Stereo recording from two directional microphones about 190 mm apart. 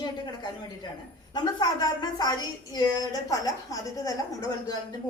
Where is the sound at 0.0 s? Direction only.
20° left (ahead or behind).